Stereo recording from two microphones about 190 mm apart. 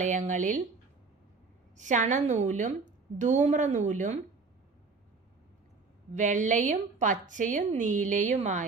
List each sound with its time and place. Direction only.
0.0 s a woman's voice: 40° right (ahead or behind)
1.7 s a woman's voice: 40° right (ahead or behind)
6.1 s a woman's voice: 40° right (ahead or behind)